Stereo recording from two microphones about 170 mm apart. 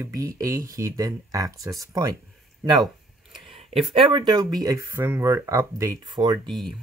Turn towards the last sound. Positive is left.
turn(degrees=0)  # may be behind; listen again after turning